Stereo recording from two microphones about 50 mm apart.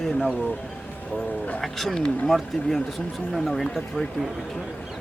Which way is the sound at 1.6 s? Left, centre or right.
Centre.